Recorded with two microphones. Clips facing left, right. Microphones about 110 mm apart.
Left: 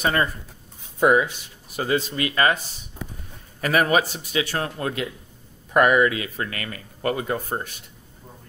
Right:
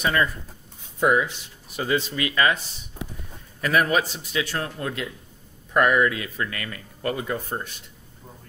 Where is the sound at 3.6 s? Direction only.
55° left (ahead or behind).